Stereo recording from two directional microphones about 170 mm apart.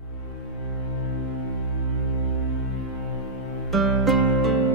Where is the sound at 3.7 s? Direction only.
Centre (ahead or behind).